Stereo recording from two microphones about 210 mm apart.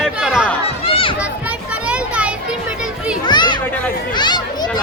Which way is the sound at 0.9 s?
25° left (ahead or behind).